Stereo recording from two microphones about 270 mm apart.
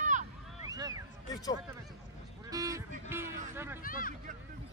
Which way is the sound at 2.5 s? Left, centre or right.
Centre.